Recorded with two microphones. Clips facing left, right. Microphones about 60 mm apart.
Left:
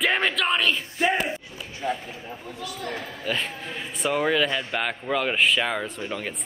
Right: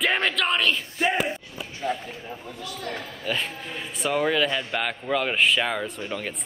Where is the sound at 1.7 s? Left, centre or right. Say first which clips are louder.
Even; centre.